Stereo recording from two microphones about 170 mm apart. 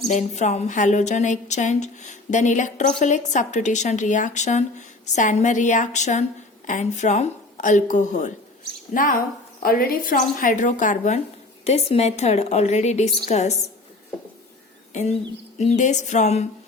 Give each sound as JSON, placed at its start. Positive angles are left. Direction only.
{"t": 0.1, "sound": "a woman's voice", "side_deg": 45}
{"t": 15.5, "sound": "a woman's voice", "side_deg": 45}